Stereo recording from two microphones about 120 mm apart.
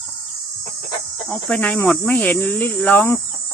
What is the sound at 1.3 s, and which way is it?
Cricket, 10° left (ahead or behind).